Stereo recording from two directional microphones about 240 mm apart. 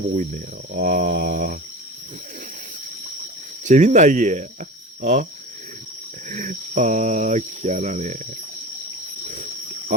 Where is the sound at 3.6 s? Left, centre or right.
Right.